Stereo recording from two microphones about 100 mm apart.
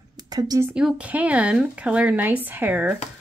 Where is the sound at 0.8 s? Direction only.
15° right (ahead or behind).